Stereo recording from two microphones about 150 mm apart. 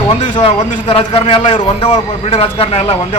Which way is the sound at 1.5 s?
50° left (ahead or behind).